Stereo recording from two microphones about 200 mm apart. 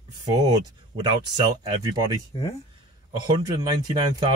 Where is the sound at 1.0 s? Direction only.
20° right (ahead or behind).